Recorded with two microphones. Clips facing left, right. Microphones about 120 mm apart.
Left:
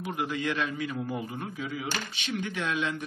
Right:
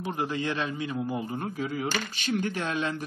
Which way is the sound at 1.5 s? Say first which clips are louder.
Right 5 dB; 45° right (ahead or behind).